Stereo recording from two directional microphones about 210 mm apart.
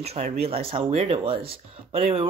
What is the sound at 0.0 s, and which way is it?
Speech, 30° right (ahead or behind).